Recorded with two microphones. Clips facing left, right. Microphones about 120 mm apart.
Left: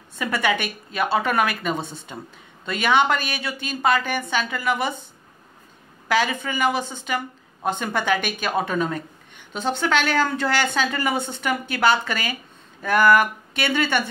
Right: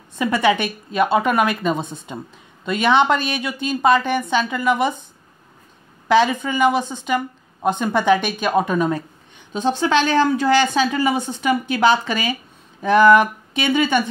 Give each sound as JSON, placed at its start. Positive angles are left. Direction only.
{"t": 0.1, "sound": "a woman's voice", "side_deg": -25}
{"t": 6.0, "sound": "a woman's voice", "side_deg": -20}